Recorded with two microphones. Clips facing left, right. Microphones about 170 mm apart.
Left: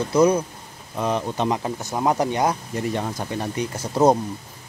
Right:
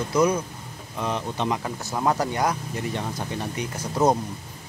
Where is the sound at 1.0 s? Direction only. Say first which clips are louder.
Left 4 dB; 40° left (ahead or behind).